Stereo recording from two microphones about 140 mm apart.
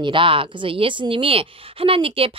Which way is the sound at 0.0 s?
35° right (ahead or behind).